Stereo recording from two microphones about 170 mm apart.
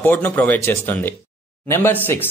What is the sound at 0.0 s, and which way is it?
Speech, 10° left (ahead or behind).